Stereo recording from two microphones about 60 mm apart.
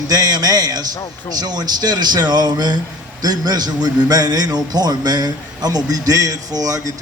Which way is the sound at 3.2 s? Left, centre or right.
Right.